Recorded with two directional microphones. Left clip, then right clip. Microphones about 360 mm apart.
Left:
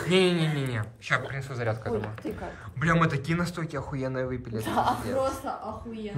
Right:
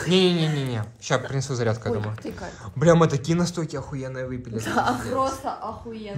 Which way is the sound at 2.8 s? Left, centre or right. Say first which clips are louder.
Right 7 dB; centre.